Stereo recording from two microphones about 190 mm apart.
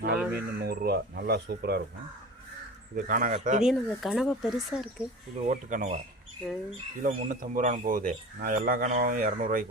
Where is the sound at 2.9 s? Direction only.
45° right (ahead or behind).